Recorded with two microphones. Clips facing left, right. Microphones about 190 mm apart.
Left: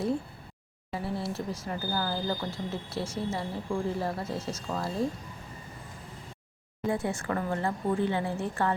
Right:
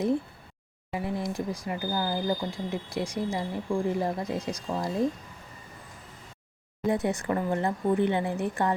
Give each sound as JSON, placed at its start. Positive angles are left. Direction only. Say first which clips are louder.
{"t": 0.9, "sound": "speech", "louder": "right 2 dB", "side_deg": -15}
{"t": 6.8, "sound": "speech", "louder": "right 3 dB", "side_deg": -20}